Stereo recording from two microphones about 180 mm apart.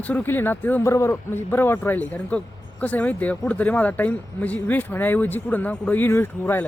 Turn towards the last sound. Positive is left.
turn(degrees=10)  # may be behind; listen again after turning